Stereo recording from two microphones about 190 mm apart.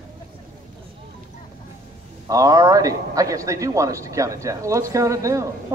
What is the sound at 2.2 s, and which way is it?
A man's voice, 20° right (ahead or behind).